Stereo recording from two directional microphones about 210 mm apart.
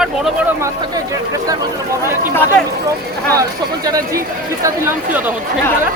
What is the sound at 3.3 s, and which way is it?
Speech, 15° right (ahead or behind).